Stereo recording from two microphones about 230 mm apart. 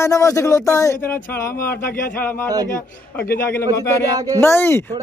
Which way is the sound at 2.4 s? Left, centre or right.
Centre.